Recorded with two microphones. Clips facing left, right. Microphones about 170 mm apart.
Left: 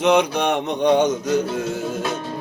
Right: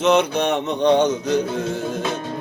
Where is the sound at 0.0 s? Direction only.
10° left (ahead or behind).